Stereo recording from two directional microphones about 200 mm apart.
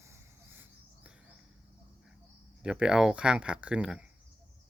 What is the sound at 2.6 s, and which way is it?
Speech, 5° right (ahead or behind).